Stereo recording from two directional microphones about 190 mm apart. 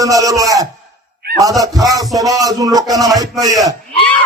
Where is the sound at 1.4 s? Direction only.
20° right (ahead or behind).